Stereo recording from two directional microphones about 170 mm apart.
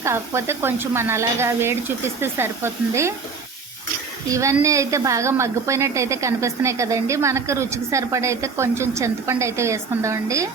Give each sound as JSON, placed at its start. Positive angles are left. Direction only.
{"t": 0.0, "sound": "a woman's voice", "side_deg": -15}
{"t": 4.3, "sound": "a woman's voice", "side_deg": -20}